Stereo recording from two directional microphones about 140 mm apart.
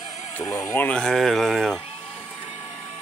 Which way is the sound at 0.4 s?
20° left (ahead or behind).